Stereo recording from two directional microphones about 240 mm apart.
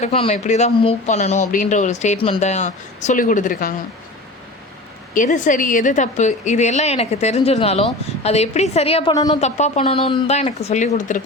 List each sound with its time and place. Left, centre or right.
0.0 s speech: left
5.1 s speech: left; by 9.4 s centre
9.4 s speech: left